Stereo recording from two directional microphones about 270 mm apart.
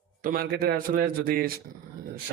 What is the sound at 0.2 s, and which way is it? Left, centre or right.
Speech, right.